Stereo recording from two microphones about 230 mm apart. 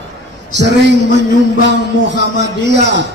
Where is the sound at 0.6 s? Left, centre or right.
Right.